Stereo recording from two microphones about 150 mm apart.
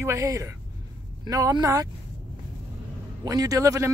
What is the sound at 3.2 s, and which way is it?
Speech, 25° right (ahead or behind).